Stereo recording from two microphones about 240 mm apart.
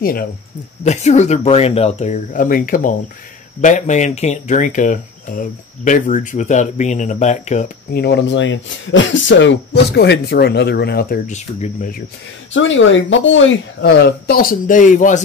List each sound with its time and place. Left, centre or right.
0.0 s speech: left
12.5 s speech: left